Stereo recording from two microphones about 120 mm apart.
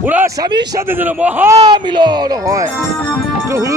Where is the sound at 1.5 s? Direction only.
35° right (ahead or behind).